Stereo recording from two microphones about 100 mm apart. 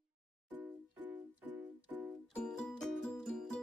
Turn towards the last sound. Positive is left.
turn(degrees=5)  # may be behind; listen again after turning